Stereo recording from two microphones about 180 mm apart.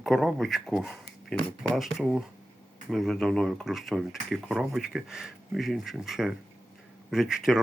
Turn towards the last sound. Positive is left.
turn(degrees=0)  # may be behind; listen again after turning